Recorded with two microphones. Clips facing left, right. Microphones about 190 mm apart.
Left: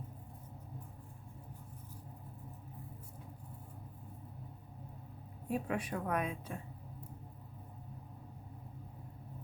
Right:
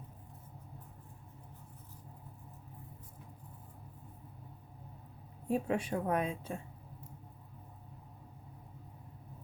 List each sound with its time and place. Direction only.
5.5 s a woman's voice: 25° right (ahead or behind)